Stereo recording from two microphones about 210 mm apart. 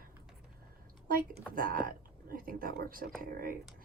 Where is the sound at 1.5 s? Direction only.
40° right (ahead or behind).